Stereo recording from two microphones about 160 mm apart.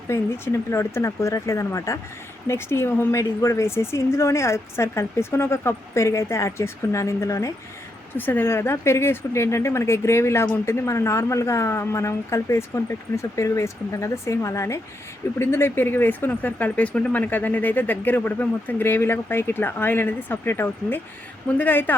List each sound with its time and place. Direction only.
0.1 s speech: 15° left (ahead or behind)